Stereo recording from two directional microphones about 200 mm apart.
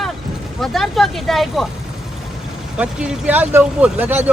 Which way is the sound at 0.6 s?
Centre (ahead or behind).